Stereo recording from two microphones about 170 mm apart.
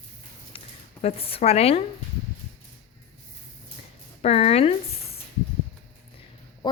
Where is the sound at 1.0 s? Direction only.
35° left (ahead or behind).